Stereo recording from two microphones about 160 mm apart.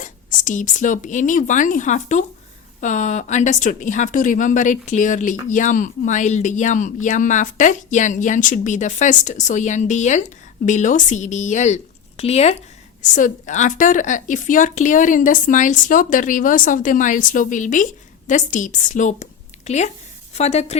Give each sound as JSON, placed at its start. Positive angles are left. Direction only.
{"t": 0.0, "sound": "speech", "side_deg": 50}
{"t": 13.0, "sound": "a woman's voice", "side_deg": 55}